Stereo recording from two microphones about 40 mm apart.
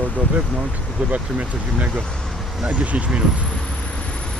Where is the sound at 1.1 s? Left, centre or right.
Right.